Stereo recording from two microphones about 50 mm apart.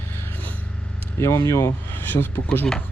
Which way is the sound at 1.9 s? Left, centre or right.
Left.